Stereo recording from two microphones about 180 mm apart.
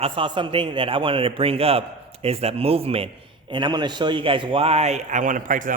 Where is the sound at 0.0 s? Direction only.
30° right (ahead or behind).